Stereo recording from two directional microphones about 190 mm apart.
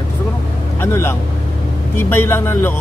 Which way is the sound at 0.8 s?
10° left (ahead or behind).